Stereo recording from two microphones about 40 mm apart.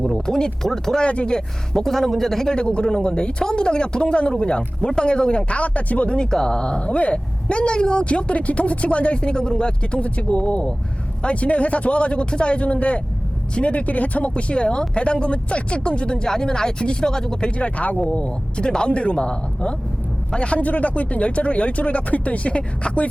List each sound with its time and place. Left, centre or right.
0.0 s speech: centre
1.0 s speech: left; by 2.5 s centre
2.5 s speech: left
6.3 s speech: centre
17.6 s speech: left